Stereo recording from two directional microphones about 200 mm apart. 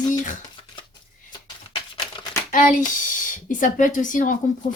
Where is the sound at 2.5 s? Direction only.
40° left (ahead or behind).